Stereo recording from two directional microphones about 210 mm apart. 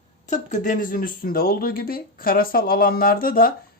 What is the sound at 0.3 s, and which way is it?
Speech, 35° left (ahead or behind).